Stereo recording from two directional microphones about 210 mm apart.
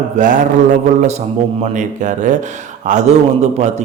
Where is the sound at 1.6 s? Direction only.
35° right (ahead or behind).